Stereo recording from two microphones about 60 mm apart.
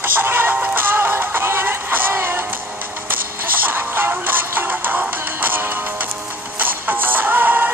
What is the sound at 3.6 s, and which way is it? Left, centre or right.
Music, right.